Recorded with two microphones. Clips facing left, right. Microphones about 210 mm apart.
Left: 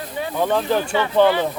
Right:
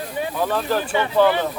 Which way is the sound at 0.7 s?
5° right (ahead or behind).